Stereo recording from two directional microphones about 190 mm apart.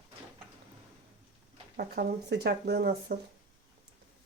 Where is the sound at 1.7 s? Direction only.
55° right (ahead or behind).